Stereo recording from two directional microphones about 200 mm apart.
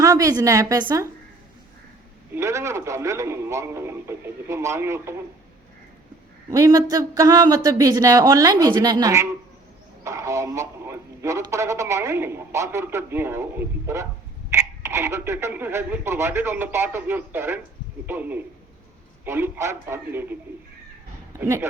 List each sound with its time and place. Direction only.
0.0 s a man's voice: 15° right (ahead or behind)
2.3 s a man's voice: 15° right (ahead or behind)
6.5 s a man's voice: 15° right (ahead or behind)
21.3 s a man's voice: 15° right (ahead or behind)